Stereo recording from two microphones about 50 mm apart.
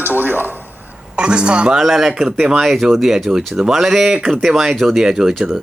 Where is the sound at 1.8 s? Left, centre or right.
Centre.